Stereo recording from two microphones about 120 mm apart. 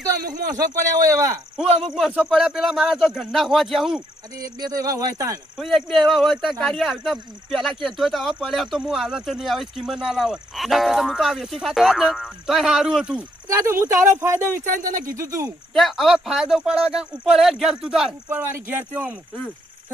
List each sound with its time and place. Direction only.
0.2 s a man's voice: 30° right (ahead or behind)
1.6 s speech: 60° right (ahead or behind)
2.0 s speech: centre (ahead or behind)
4.4 s speech: 30° right (ahead or behind)
5.5 s speech: centre (ahead or behind)
13.5 s speech: 25° right (ahead or behind)
14.6 s speech: 90° right
15.1 s speech: 25° right (ahead or behind)
15.7 s speech: centre (ahead or behind)
18.3 s speech: 20° right (ahead or behind)